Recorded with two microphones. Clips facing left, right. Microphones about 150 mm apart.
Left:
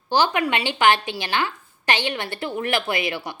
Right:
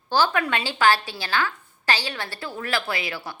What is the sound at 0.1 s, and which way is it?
A woman's voice, 15° left (ahead or behind).